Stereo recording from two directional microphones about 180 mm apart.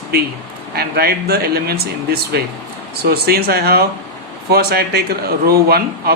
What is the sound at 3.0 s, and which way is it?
Speech, 60° right (ahead or behind).